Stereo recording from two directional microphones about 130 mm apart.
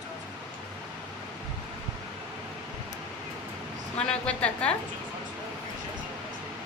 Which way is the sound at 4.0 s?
10° left (ahead or behind).